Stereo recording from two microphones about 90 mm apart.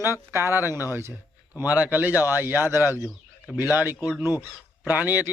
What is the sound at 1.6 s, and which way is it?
Speech, 20° right (ahead or behind).